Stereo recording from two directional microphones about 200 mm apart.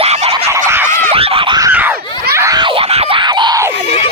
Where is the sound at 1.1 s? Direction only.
30° right (ahead or behind).